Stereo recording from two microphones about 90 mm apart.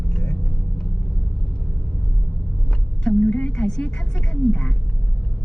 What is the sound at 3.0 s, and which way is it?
A woman's voice, 10° left (ahead or behind).